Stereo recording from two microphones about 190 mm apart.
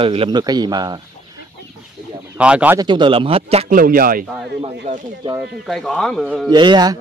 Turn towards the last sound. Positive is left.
turn(degrees=-20)  # may be behind; listen again after turning